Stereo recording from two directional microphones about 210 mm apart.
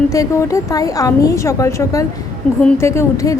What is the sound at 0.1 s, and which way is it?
A woman's voice, 15° left (ahead or behind).